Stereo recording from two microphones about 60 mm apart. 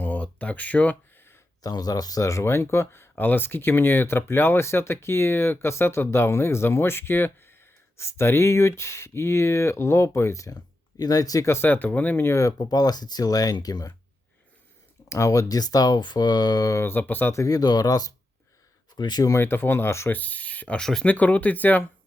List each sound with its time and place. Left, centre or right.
0.0 s a sound: left
1.6 s speech: left
2.4 s speech: left
11.4 s speech: left
12.2 s speech: left
15.1 s speech: left
16.8 s speech: left
17.3 s speech: left
19.4 s speech: left
20.1 s speech: left
20.7 s speech: centre
21.0 s speech: left